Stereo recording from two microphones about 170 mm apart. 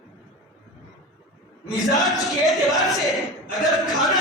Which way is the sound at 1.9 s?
Centre (ahead or behind).